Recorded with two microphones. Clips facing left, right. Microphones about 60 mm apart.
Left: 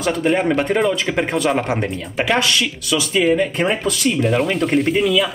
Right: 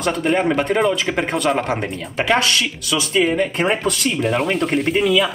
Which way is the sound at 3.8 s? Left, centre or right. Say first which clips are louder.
Left 1 dB; right.